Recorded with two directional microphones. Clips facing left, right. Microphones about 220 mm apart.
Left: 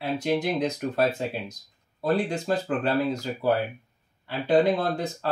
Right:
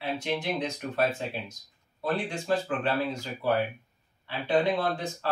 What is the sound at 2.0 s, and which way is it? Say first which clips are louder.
Speech: left 4 dB; 40° left (ahead or behind).